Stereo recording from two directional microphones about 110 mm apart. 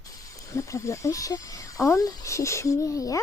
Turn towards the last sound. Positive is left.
turn(degrees=30)  # may be behind; listen again after turning